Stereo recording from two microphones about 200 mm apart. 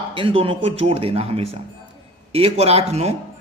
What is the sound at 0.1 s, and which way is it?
Speech, 25° right (ahead or behind).